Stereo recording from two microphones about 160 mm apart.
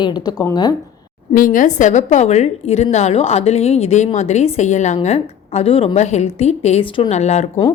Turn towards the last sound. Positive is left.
turn(degrees=45)  # may be behind; listen again after turning